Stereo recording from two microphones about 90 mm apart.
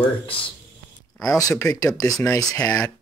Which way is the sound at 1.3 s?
40° left (ahead or behind).